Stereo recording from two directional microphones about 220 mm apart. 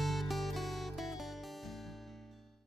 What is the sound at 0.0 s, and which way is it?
Music, centre (ahead or behind).